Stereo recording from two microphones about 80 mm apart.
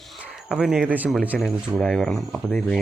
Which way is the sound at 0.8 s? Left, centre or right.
Right.